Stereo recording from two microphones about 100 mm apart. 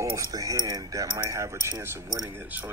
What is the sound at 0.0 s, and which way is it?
Speech, 30° right (ahead or behind).